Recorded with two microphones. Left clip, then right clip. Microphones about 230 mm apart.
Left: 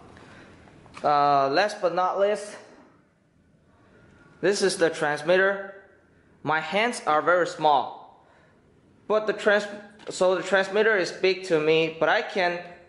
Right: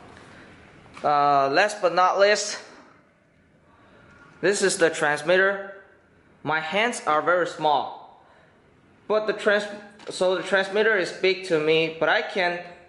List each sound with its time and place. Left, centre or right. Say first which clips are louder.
0.9 s a man's voice: right 1 dB; centre
4.4 s a man's voice: right 2 dB; centre
9.0 s a man's voice: right 1 dB; centre